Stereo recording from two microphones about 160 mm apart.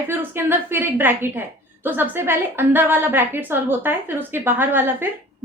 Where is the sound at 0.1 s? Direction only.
15° right (ahead or behind).